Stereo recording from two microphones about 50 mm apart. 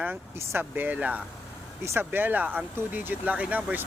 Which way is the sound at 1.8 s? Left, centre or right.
Right.